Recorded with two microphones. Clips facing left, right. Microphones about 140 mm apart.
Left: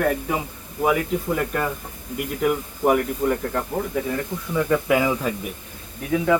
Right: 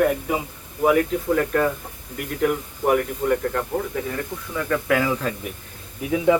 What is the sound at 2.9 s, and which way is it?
Speech, centre (ahead or behind).